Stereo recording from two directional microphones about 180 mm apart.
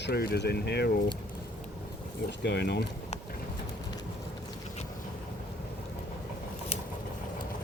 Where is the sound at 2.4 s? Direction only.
70° left (ahead or behind).